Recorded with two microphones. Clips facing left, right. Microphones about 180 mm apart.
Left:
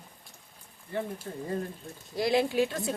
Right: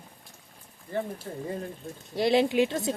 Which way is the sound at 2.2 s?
25° right (ahead or behind).